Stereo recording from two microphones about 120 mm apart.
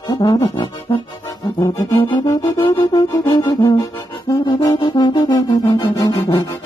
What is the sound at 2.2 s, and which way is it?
Music, 25° left (ahead or behind).